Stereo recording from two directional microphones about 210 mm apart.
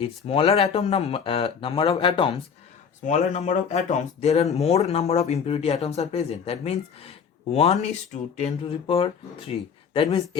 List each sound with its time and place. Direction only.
0.3 s speech: 25° left (ahead or behind)